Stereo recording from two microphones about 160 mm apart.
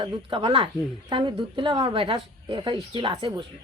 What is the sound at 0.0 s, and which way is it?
A woman's voice, 30° right (ahead or behind).